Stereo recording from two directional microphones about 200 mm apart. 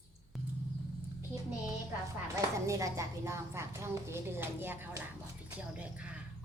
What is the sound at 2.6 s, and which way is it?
A woman's voice, 15° right (ahead or behind).